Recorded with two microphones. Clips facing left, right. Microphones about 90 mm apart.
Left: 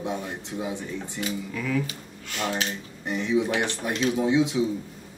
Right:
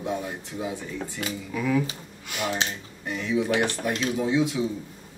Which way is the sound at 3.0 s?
20° left (ahead or behind).